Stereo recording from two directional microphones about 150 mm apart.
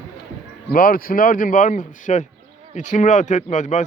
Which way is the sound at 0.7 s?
70° left (ahead or behind).